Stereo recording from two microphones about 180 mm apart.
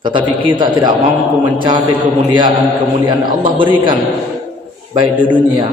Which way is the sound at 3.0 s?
25° right (ahead or behind).